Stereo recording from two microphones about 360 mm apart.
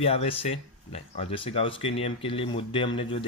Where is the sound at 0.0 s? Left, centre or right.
Centre.